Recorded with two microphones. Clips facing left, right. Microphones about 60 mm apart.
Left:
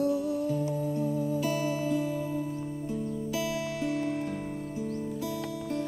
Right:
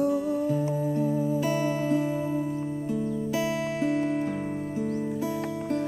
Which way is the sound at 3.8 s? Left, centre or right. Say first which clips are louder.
Right 5 dB; right.